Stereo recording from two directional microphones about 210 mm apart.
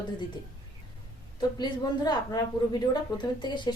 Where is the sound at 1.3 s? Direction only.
20° left (ahead or behind).